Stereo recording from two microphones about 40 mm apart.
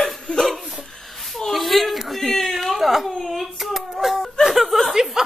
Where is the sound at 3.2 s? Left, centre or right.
Centre.